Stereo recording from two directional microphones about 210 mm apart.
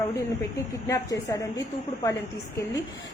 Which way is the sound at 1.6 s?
15° left (ahead or behind).